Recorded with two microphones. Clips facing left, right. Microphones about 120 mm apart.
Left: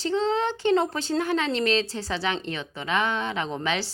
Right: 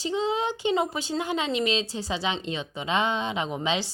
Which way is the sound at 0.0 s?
15° right (ahead or behind).